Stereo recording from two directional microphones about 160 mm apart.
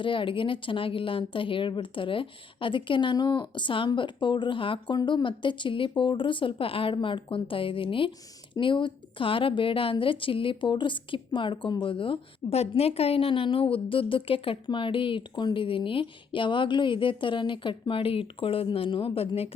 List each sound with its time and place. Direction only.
0.0 s a woman's voice: 30° left (ahead or behind)